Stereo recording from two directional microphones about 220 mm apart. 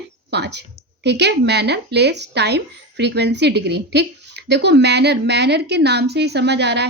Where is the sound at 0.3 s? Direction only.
50° right (ahead or behind).